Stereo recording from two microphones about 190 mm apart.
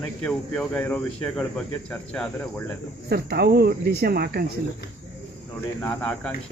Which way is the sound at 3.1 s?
55° right (ahead or behind).